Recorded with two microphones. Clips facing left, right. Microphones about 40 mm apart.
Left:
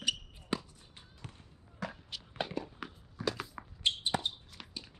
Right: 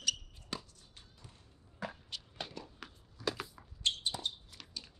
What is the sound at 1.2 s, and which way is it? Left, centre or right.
Basketball bounce, left.